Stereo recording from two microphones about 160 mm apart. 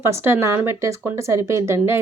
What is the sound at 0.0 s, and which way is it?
Speech, 15° right (ahead or behind).